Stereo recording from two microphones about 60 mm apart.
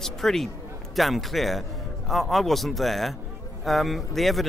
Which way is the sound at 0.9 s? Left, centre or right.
Centre.